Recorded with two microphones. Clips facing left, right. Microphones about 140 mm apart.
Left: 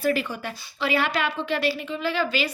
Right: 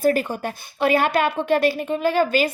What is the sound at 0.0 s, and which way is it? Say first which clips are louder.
Speech: right 5 dB; 45° right (ahead or behind).